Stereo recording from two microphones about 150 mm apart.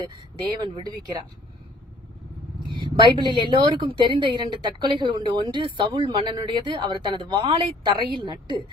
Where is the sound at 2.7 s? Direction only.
35° right (ahead or behind).